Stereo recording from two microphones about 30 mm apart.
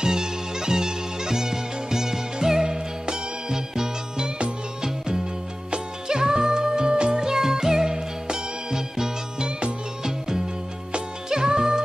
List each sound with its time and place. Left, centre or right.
0.0 s music: right
7.3 s music: centre